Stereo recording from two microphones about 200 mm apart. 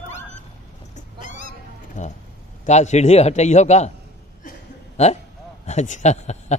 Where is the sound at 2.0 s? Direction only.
35° left (ahead or behind).